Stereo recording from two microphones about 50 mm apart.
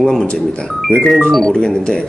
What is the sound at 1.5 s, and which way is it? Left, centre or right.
Speech, centre.